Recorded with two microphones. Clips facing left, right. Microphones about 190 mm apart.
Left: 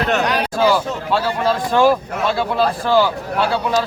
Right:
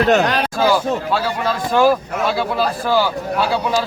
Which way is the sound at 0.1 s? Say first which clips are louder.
Right 3 dB; 45° right (ahead or behind).